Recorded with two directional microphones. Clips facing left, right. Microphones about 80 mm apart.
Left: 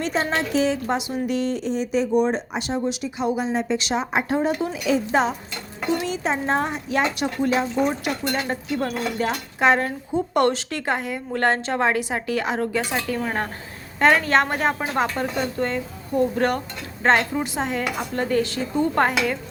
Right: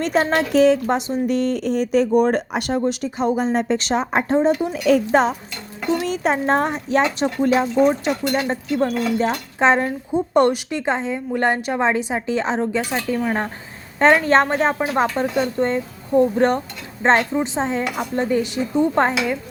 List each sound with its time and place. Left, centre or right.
0.0 s a child's voice: right
4.4 s a woman's voice: right
4.7 s a child's voice: right
7.2 s a child's voice: right
14.0 s a woman's voice: right